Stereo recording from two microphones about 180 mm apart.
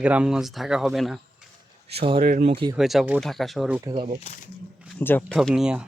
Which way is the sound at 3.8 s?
30° right (ahead or behind).